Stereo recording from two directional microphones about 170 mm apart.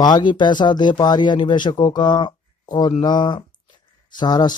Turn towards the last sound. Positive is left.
turn(degrees=25)  # may be behind; listen again after turning